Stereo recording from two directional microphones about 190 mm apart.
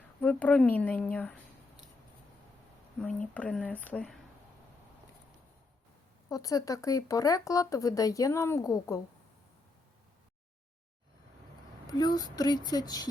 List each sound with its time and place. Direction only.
0.2 s speech: 10° left (ahead or behind)
3.0 s speech: 5° left (ahead or behind)
6.2 s speech: 20° left (ahead or behind)
11.9 s speech: 20° left (ahead or behind)